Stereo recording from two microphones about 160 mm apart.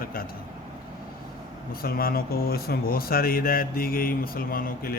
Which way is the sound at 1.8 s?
70° left (ahead or behind).